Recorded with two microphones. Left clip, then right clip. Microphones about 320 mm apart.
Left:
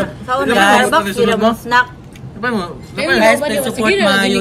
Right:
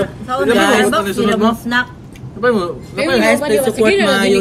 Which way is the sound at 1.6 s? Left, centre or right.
Left.